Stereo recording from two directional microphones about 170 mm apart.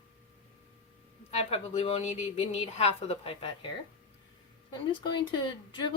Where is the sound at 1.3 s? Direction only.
35° left (ahead or behind).